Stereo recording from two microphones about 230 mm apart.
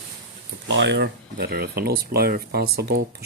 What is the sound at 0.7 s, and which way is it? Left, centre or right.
Speech, right.